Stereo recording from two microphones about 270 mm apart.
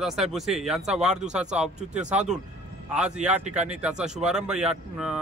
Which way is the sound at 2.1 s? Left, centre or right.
Right.